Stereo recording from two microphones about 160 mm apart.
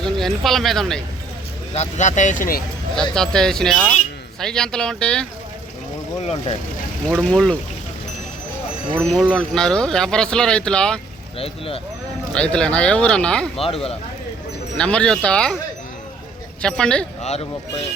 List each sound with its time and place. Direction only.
0.0 s speech: centre (ahead or behind)
1.7 s speech: 45° left (ahead or behind); by 2.6 s 60° left (ahead or behind)
2.9 s speech: 5° left (ahead or behind)
6.2 s speech: 35° left (ahead or behind)
7.2 s speech: 5° left (ahead or behind)
9.1 s speech: 5° left (ahead or behind)
11.3 s speech: 35° left (ahead or behind)
12.3 s speech: 5° left (ahead or behind)
13.6 s speech: 35° left (ahead or behind)
14.8 s speech: 5° left (ahead or behind)
16.6 s speech: 5° left (ahead or behind)